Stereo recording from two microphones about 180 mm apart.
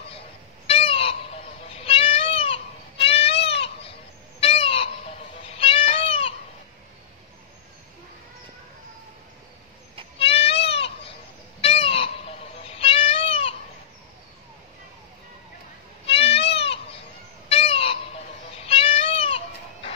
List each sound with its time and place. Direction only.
0.7 s chicken: 30° left (ahead or behind)
1.9 s goat: 30° left (ahead or behind)
4.4 s bird: 30° left (ahead or behind)
5.6 s cat: 30° left (ahead or behind)
10.1 s goat: 35° left (ahead or behind)
11.6 s cat: 30° left (ahead or behind)
16.1 s goat: 30° left (ahead or behind)
17.5 s fowl: 30° left (ahead or behind)
18.7 s cat: 30° left (ahead or behind)